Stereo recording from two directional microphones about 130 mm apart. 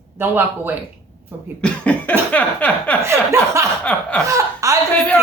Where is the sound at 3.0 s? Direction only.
20° right (ahead or behind).